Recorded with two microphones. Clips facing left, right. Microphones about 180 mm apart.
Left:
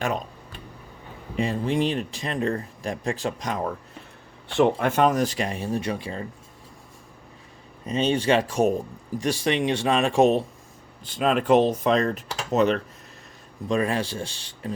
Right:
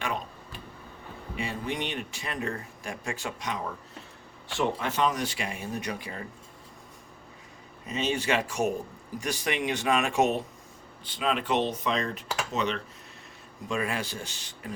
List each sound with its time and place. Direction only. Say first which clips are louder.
1.4 s speech: left 9 dB; 35° left (ahead or behind)
4.5 s speech: left 8 dB; 55° left (ahead or behind); by 6.2 s 30° left (ahead or behind)
7.9 s speech: left 6 dB; 30° left (ahead or behind)
11.0 s speech: left 7 dB; 45° left (ahead or behind)
13.7 s speech: left 7 dB; 35° left (ahead or behind)